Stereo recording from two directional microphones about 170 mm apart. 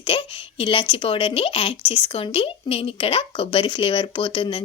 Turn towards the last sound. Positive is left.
turn(degrees=30)  # may be behind; listen again after turning